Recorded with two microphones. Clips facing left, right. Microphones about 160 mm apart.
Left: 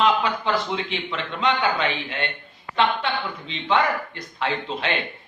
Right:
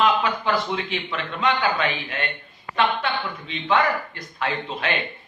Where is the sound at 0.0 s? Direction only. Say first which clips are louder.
Even; 25° left (ahead or behind).